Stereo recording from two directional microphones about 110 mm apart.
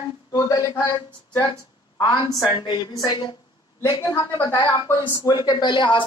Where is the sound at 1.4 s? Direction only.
40° left (ahead or behind).